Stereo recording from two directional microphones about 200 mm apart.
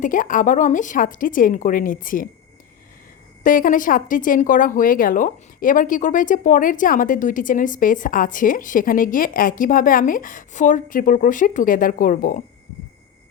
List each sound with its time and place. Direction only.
0.0 s a woman's voice: 40° left (ahead or behind)
3.4 s a woman's voice: 45° left (ahead or behind)